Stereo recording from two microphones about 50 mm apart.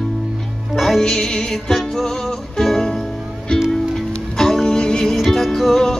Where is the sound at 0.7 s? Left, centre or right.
Centre.